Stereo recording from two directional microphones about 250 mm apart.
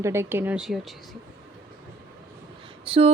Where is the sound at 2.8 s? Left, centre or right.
Right.